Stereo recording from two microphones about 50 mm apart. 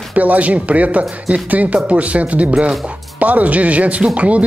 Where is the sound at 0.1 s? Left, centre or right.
Right.